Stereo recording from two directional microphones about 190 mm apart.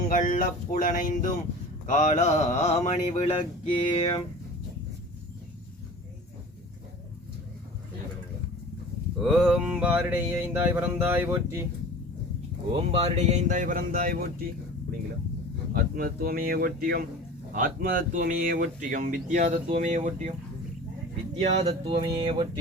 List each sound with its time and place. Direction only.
0.1 s speech: 45° left (ahead or behind)
1.9 s a sound: 40° left (ahead or behind)
9.2 s mantra: centre (ahead or behind)
12.7 s speech: 30° right (ahead or behind); by 14.4 s 50° right (ahead or behind)
15.7 s speech: 50° right (ahead or behind)
21.3 s speech: 30° right (ahead or behind)